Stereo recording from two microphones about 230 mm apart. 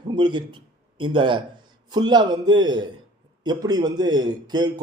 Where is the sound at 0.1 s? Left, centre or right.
Centre.